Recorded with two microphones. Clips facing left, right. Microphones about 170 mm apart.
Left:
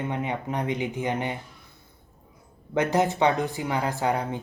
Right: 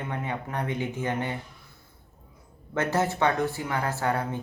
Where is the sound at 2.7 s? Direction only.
15° left (ahead or behind).